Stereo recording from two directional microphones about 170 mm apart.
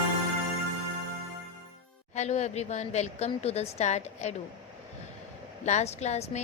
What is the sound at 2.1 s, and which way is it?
A woman's voice, 40° left (ahead or behind).